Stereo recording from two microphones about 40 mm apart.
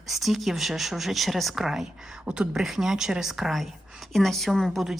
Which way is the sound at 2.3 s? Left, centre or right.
Right.